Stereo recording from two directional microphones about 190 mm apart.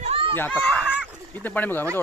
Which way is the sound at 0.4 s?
10° left (ahead or behind).